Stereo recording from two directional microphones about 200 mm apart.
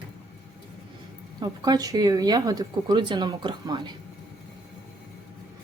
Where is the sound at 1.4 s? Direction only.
20° right (ahead or behind).